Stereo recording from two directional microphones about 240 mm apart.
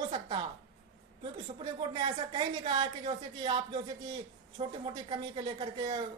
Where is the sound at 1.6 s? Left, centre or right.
Centre.